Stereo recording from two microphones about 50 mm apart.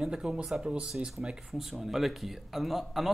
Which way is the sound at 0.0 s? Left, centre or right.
Centre.